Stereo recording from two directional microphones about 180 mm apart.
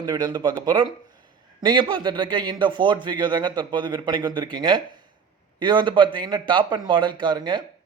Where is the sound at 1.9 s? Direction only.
25° right (ahead or behind).